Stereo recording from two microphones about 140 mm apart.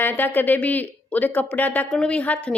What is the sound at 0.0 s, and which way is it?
Speech, 15° left (ahead or behind).